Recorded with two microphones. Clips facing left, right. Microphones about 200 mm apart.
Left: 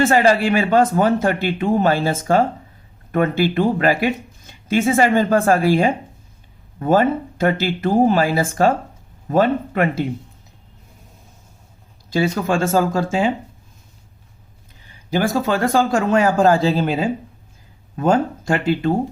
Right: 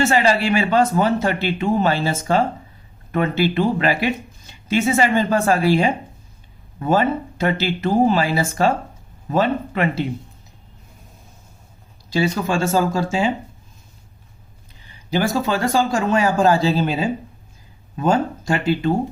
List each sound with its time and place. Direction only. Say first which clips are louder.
0.0 s speech: left 3 dB; 50° left (ahead or behind)
12.1 s speech: left 1 dB; 55° left (ahead or behind)
15.1 s speech: left 1 dB; 50° left (ahead or behind)